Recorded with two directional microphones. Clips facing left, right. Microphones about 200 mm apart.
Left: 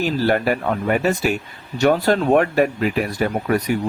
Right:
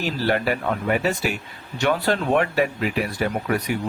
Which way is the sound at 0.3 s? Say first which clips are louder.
Left 1 dB; 45° left (ahead or behind).